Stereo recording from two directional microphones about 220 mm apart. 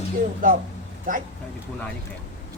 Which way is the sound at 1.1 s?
40° right (ahead or behind).